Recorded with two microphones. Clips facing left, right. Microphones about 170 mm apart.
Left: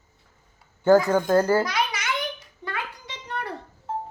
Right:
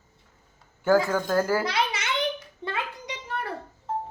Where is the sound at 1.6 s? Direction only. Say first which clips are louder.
Left 1 dB; 30° right (ahead or behind).